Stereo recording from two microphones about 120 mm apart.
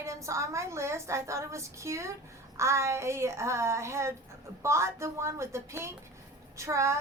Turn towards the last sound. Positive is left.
turn(degrees=-25)  # may be behind; listen again after turning